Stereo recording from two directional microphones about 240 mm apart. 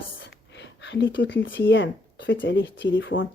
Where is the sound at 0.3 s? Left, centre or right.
Left.